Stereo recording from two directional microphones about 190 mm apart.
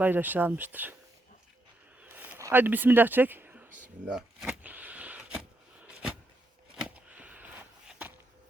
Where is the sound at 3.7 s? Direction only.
45° right (ahead or behind).